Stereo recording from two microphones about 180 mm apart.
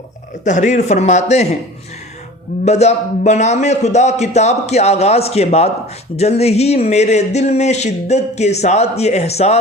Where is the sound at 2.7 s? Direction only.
40° left (ahead or behind).